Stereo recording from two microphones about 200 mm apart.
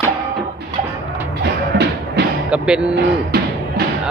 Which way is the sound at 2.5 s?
5° right (ahead or behind).